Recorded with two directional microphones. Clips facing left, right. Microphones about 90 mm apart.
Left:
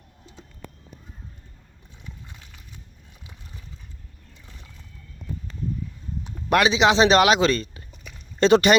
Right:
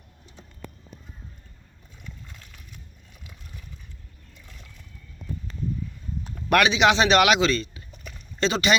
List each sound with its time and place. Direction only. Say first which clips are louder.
6.2 s speech: left 1 dB; 25° left (ahead or behind); by 8.7 s 50° left (ahead or behind)